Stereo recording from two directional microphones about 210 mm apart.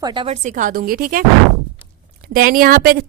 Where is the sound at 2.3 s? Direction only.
40° right (ahead or behind).